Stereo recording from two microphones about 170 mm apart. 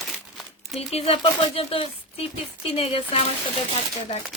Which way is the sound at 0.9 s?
35° left (ahead or behind).